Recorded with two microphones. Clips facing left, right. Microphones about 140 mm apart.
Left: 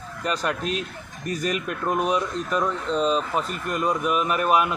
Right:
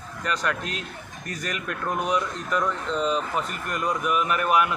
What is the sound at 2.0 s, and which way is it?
A man's voice, 25° left (ahead or behind).